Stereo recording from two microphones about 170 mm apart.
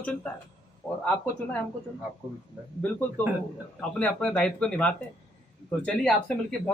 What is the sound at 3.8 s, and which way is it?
A man's voice, 5° left (ahead or behind).